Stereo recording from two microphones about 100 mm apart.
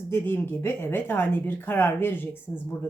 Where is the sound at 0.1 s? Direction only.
25° left (ahead or behind).